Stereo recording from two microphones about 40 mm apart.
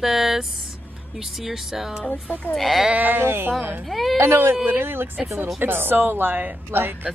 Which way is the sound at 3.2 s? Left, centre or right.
Right.